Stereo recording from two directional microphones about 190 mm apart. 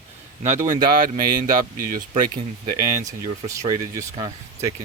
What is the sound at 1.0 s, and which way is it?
Speech, 45° right (ahead or behind).